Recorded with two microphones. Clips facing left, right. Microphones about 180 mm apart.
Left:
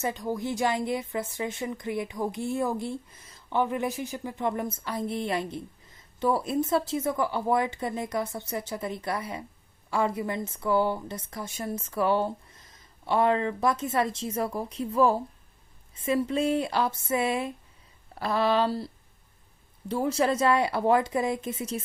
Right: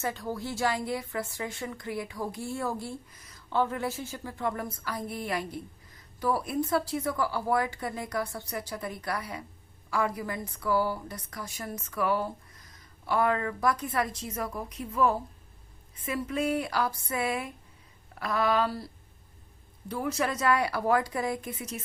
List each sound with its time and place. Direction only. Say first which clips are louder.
0.0 s a woman's voice: left 3 dB; 20° left (ahead or behind)
19.9 s a woman's voice: left 5 dB; 30° left (ahead or behind)